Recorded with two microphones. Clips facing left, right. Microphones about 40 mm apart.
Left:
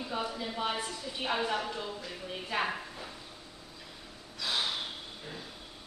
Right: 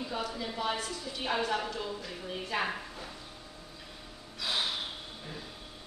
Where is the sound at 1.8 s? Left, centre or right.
Centre.